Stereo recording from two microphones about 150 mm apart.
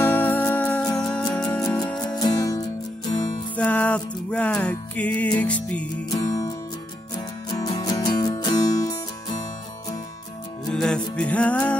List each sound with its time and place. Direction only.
0.0 s music: 10° left (ahead or behind)
2.0 s music: 25° left (ahead or behind)
3.5 s music: 10° left (ahead or behind)
7.2 s music: 25° left (ahead or behind)
10.7 s music: 5° left (ahead or behind)